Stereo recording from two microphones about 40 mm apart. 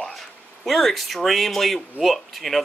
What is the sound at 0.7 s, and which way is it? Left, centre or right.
Speech, centre.